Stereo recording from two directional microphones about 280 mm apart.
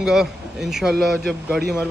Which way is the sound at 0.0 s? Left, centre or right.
Centre.